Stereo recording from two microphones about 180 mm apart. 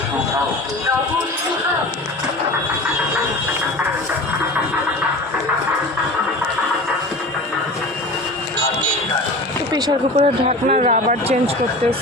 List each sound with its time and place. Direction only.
10.2 s speech: 35° right (ahead or behind)